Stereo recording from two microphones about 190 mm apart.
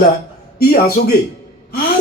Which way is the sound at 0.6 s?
50° left (ahead or behind).